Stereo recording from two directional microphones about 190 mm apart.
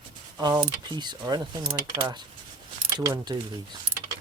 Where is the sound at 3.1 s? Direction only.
20° right (ahead or behind).